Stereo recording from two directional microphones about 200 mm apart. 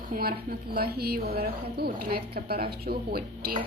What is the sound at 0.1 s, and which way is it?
A woman's voice, 50° right (ahead or behind).